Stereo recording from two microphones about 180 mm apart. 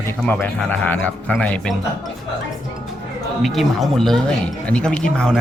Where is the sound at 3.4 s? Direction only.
Centre (ahead or behind).